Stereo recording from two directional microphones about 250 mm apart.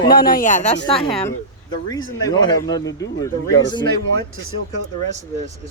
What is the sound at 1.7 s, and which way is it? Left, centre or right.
Speech, centre.